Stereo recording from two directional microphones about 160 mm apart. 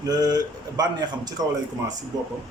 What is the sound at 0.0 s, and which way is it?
A man's voice, 25° right (ahead or behind).